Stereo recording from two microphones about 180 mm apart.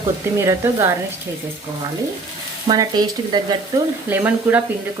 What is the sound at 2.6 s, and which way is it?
Stir, 25° right (ahead or behind).